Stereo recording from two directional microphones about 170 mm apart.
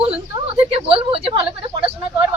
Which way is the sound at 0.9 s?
35° right (ahead or behind).